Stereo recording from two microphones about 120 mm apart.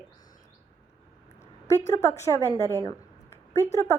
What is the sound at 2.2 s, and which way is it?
A woman's voice, 25° left (ahead or behind).